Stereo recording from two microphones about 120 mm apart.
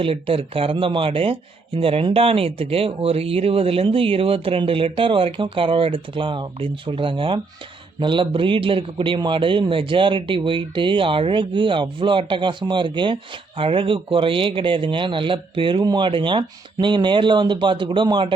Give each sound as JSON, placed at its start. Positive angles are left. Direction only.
{"t": 0.0, "sound": "a man's voice", "side_deg": -50}